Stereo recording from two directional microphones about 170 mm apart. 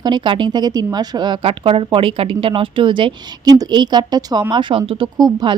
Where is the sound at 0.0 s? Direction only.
25° right (ahead or behind).